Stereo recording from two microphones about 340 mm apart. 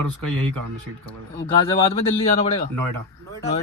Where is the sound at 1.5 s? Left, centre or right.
Centre.